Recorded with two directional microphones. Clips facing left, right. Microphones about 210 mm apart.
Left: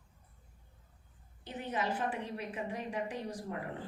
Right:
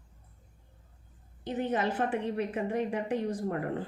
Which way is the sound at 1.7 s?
50° right (ahead or behind).